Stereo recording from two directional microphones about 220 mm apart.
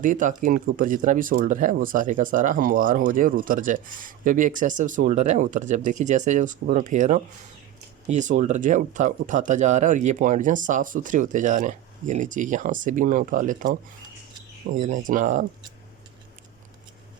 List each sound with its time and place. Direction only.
0.0 s speech: 35° right (ahead or behind)
14.8 s speech: 35° right (ahead or behind)